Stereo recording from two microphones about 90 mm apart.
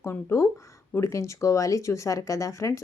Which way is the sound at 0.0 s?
30° left (ahead or behind).